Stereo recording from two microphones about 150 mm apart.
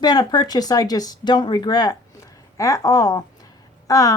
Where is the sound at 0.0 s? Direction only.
30° left (ahead or behind).